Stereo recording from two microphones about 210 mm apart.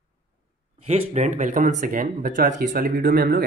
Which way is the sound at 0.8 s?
30° right (ahead or behind).